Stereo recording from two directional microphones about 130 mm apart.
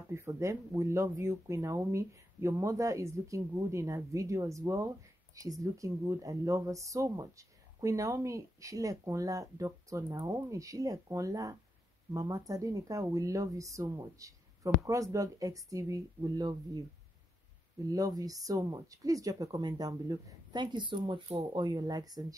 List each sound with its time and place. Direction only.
0.1 s speech: 20° right (ahead or behind)
17.8 s speech: 25° right (ahead or behind)